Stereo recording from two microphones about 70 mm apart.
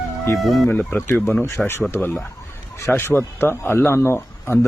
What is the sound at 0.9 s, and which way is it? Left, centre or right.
Speech, left.